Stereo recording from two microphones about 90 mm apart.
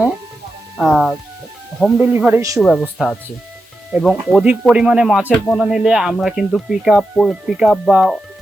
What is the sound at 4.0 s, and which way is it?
Speech, 5° right (ahead or behind).